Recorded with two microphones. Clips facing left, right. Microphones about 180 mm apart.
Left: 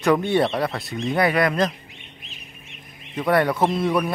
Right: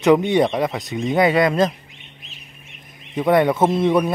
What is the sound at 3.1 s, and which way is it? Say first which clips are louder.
Speech: right 4 dB; 20° right (ahead or behind).